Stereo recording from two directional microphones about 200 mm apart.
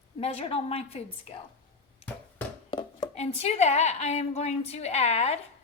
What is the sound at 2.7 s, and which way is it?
A woman's voice, 25° left (ahead or behind).